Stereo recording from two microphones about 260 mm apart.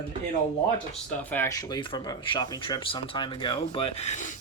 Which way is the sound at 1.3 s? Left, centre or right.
Centre.